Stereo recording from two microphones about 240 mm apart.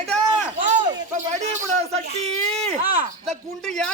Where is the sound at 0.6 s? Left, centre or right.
Right.